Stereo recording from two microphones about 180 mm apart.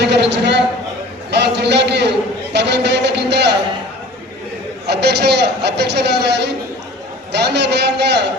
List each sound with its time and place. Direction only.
0.0 s a sound: 70° right (ahead or behind)
1.3 s a man's voice: 70° right (ahead or behind)
4.9 s a man's voice: 65° right (ahead or behind)